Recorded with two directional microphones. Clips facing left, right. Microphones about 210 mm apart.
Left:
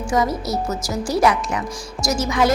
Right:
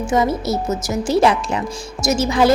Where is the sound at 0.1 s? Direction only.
25° right (ahead or behind).